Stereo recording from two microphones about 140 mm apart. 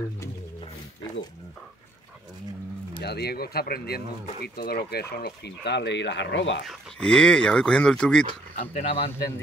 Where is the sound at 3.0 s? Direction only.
90° left.